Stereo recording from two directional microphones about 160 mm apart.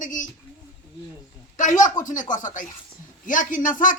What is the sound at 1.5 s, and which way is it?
A man's voice, 50° left (ahead or behind).